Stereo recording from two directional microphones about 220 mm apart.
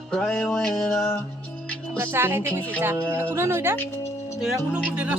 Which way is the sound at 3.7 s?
10° left (ahead or behind).